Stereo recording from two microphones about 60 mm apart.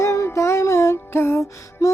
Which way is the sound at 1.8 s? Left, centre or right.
Left.